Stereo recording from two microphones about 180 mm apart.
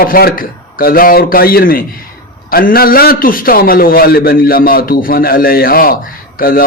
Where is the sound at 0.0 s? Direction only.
55° left (ahead or behind).